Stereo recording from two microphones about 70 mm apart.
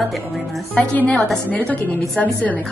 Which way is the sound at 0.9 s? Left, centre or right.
Centre.